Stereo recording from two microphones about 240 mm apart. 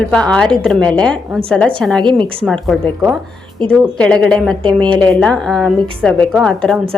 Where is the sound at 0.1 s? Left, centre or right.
Centre.